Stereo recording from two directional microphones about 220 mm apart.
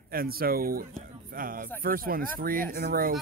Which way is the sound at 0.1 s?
40° right (ahead or behind).